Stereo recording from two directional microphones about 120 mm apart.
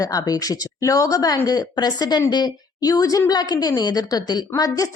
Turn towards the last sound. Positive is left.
turn(degrees=30)  # may be behind; listen again after turning